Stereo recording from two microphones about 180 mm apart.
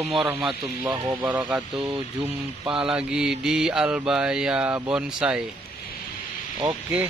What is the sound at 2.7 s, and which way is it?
Mantra, 5° right (ahead or behind).